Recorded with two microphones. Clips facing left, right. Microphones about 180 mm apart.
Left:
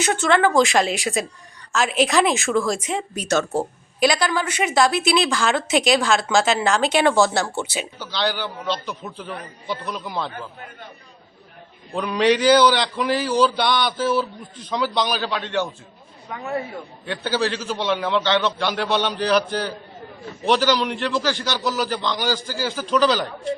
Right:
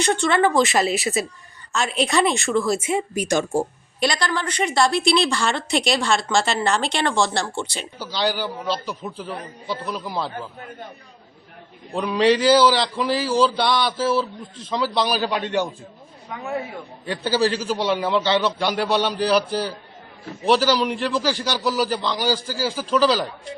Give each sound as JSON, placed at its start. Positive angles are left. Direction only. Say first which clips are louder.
{"t": 0.0, "sound": "a woman's voice", "louder": "even", "side_deg": 5}
{"t": 4.0, "sound": "a woman's voice", "louder": "left 3 dB", "side_deg": 5}
{"t": 7.9, "sound": "a man's voice", "louder": "right 2 dB", "side_deg": -10}
{"t": 11.9, "sound": "a woman's voice", "louder": "right 1 dB", "side_deg": 0}
{"t": 14.5, "sound": "speech", "louder": "even", "side_deg": -25}
{"t": 14.9, "sound": "a man's voice", "louder": "right 1 dB", "side_deg": -10}